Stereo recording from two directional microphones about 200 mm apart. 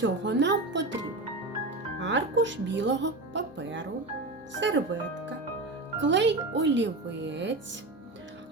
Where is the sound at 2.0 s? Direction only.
65° right (ahead or behind).